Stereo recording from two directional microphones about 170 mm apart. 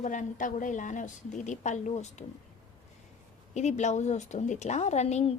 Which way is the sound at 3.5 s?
45° left (ahead or behind).